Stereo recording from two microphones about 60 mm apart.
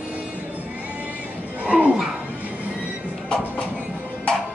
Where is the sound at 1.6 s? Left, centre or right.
Right.